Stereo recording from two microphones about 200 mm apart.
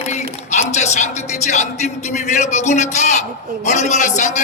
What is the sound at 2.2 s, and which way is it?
A man's voice, 35° left (ahead or behind).